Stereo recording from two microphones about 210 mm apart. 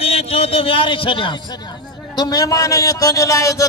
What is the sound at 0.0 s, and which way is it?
A man's voice, 30° left (ahead or behind).